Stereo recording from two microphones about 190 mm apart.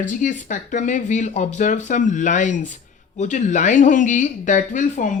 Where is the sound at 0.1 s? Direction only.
40° left (ahead or behind).